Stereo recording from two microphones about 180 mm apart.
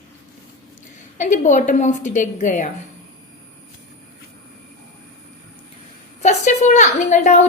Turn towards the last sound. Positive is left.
turn(degrees=40)  # may be behind; listen again after turning